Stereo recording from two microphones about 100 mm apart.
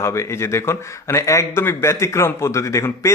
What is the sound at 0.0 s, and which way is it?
A man's voice, 30° left (ahead or behind).